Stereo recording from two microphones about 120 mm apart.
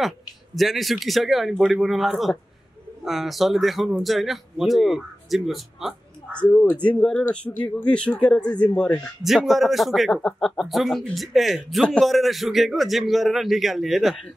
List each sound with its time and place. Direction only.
0.6 s speech: centre (ahead or behind)
6.3 s speech: 10° left (ahead or behind)
9.2 s speech: centre (ahead or behind)